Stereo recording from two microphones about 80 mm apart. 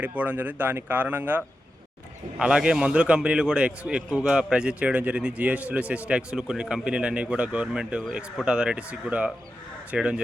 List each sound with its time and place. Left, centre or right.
0.0 s a man's voice: right